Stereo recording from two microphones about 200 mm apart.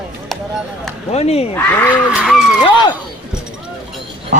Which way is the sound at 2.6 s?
25° left (ahead or behind).